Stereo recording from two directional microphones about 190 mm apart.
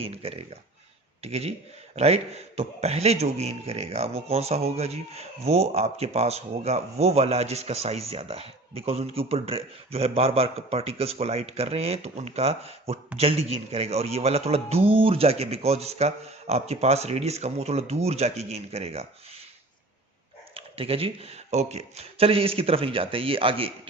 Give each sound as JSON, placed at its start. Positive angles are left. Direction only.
{"t": 0.0, "sound": "a man's voice", "side_deg": -30}
{"t": 20.5, "sound": "a man's voice", "side_deg": -30}